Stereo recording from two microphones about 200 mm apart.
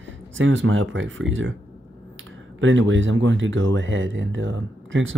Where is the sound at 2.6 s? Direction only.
70° right (ahead or behind).